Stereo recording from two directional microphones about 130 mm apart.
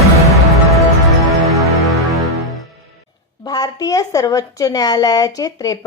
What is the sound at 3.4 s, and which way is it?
A woman's voice, 30° left (ahead or behind).